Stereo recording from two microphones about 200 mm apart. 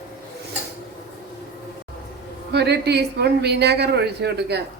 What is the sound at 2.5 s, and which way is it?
A woman's voice, 55° right (ahead or behind).